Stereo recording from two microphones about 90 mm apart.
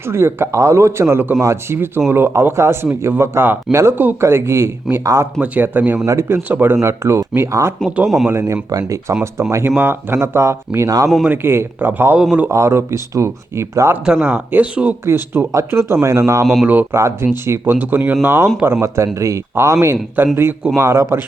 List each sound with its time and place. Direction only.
0.0 s a man's voice: 30° right (ahead or behind)
5.4 s a man's voice: 20° right (ahead or behind)
6.8 s a man's voice: 35° right (ahead or behind)
7.9 s speech: 10° right (ahead or behind)
8.3 s a man's voice: 30° right (ahead or behind)
9.6 s a man's voice: 25° right (ahead or behind); by 11.1 s 40° right (ahead or behind)
11.3 s a man's voice: 25° right (ahead or behind)
14.0 s speech: 10° right (ahead or behind)
15.0 s a man's voice: 25° right (ahead or behind)
16.6 s a man's voice: 20° right (ahead or behind)